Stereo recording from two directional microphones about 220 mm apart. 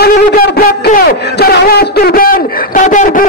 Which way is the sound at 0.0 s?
40° left (ahead or behind).